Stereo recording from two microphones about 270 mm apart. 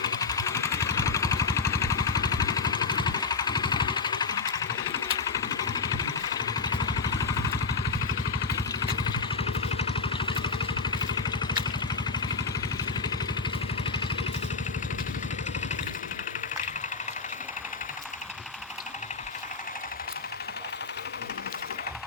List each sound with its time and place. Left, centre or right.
0.0 s vehicle: centre